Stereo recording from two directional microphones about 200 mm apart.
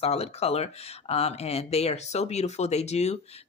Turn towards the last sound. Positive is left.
turn(degrees=35)  # may be behind; listen again after turning